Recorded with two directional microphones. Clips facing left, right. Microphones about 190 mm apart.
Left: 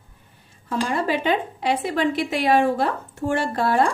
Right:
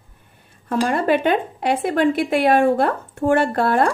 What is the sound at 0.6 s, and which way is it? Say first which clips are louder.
Speech: right 5 dB; 55° right (ahead or behind).